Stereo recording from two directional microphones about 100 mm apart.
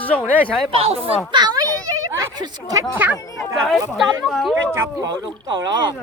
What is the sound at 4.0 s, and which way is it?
Speech, centre (ahead or behind).